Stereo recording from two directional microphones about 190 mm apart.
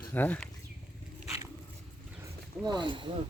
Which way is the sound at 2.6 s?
25° right (ahead or behind).